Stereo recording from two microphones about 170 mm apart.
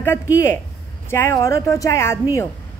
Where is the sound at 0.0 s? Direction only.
15° left (ahead or behind).